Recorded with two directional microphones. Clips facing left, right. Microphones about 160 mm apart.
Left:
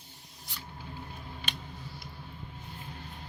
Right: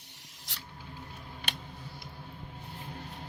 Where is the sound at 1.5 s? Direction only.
70° right (ahead or behind).